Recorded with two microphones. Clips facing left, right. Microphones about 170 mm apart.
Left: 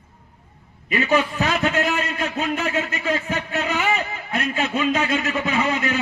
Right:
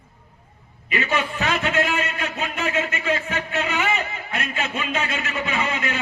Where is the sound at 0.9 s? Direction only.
35° left (ahead or behind).